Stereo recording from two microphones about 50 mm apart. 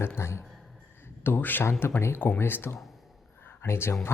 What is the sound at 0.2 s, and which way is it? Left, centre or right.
Speech, left.